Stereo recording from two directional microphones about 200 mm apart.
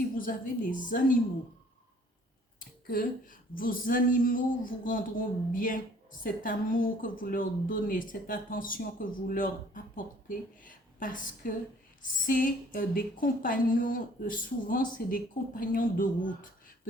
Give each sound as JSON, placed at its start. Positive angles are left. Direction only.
{"t": 0.2, "sound": "a woman's voice", "side_deg": 45}
{"t": 2.6, "sound": "a woman's voice", "side_deg": 45}